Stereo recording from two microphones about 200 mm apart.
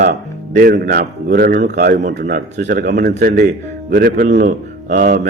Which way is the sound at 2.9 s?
45° right (ahead or behind).